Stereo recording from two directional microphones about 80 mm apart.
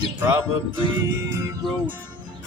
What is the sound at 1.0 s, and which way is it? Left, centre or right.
Music, right.